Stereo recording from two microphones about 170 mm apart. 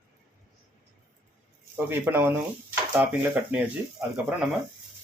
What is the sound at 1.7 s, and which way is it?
Speech, 15° right (ahead or behind).